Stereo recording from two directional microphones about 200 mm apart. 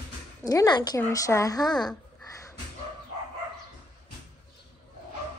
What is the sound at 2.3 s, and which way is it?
Dog, 15° left (ahead or behind).